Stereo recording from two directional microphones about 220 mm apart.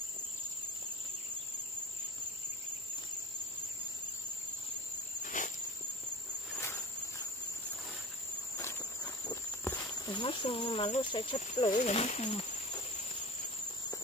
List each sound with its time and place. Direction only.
5.2 s insect: 35° left (ahead or behind)
6.5 s cricket: 10° left (ahead or behind)
8.5 s speech: 15° left (ahead or behind)